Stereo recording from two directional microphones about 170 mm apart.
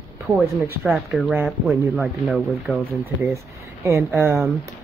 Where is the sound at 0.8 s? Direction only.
Centre (ahead or behind).